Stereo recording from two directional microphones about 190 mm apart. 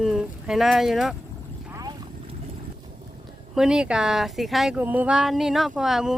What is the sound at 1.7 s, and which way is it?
Vehicle, 20° right (ahead or behind).